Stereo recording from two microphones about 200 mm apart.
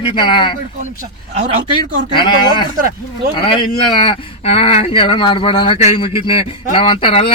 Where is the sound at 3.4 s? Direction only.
25° left (ahead or behind).